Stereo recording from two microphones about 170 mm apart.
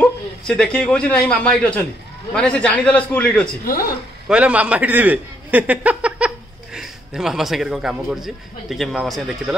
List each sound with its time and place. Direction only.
0.0 s a man's voice: 5° left (ahead or behind)
4.3 s a man's voice: 5° right (ahead or behind)